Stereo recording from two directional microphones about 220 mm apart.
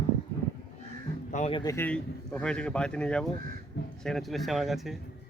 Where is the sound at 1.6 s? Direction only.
15° left (ahead or behind).